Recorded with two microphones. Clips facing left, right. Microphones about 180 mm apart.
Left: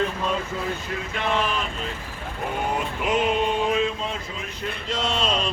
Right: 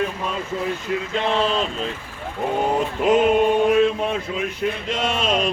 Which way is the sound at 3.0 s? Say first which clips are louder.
Right 8 dB; 35° right (ahead or behind).